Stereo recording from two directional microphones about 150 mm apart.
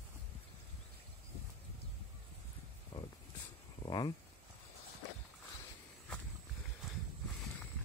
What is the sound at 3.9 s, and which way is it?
Speech, 30° left (ahead or behind).